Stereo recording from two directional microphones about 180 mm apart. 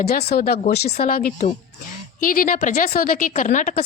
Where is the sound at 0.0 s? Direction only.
60° left (ahead or behind).